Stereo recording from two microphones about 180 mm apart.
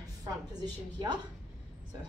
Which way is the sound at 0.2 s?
20° right (ahead or behind).